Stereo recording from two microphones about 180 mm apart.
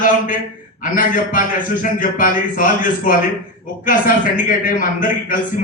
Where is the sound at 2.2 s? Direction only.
50° left (ahead or behind).